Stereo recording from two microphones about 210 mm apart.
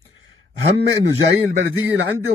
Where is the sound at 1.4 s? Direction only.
65° right (ahead or behind).